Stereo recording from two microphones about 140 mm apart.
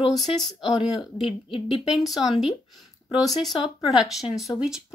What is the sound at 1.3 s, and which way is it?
Speech, 40° left (ahead or behind).